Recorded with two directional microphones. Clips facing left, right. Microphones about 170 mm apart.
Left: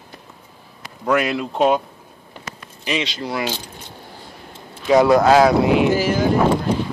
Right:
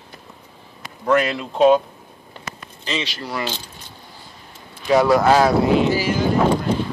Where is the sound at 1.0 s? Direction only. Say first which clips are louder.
Right 1 dB; 10° left (ahead or behind).